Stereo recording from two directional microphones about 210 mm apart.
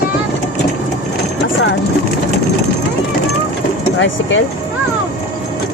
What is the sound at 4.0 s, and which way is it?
Speech, 60° left (ahead or behind).